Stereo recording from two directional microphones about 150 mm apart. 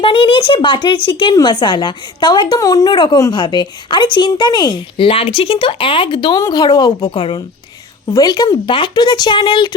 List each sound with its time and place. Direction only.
0.0 s speech: 35° left (ahead or behind)